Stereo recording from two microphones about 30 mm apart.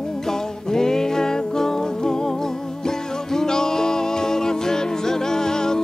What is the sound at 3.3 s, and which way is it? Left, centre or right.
Music, centre.